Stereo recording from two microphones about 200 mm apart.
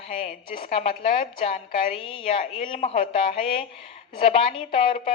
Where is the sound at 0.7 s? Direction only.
30° left (ahead or behind).